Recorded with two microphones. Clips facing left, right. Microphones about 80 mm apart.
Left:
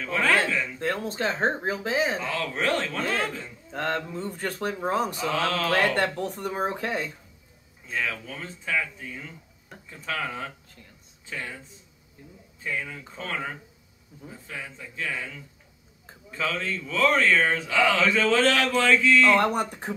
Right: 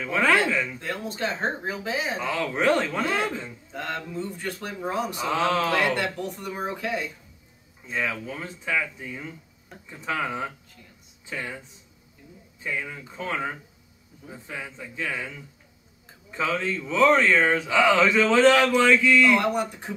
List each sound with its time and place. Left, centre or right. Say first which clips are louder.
0.0 s speech: right 2 dB; centre
0.7 s speech: left 3 dB; left
2.2 s speech: right 4 dB; centre
3.7 s speech: left 3 dB; left
5.3 s speech: right 5 dB; right
5.7 s speech: left 1 dB; left
7.8 s speech: right 2 dB; centre
12.6 s speech: right 1 dB; centre
19.3 s speech: left 1 dB; left